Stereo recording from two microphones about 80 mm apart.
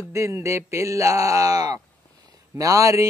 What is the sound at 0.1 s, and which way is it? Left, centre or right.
Speech, right.